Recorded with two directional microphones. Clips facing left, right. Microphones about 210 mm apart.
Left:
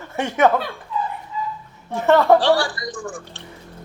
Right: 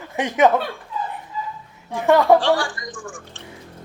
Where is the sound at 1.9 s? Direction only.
15° right (ahead or behind).